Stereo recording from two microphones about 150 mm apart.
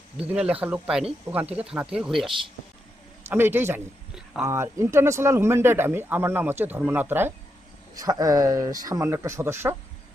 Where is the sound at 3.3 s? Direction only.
15° right (ahead or behind).